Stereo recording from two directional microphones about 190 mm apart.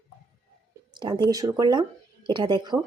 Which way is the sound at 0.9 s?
25° right (ahead or behind).